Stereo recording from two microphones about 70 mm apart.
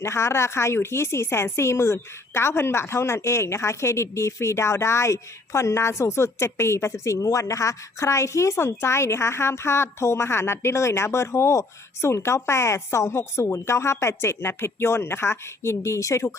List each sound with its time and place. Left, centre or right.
0.0 s speech: left